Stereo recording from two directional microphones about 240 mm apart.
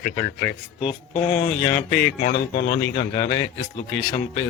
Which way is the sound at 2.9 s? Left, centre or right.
Left.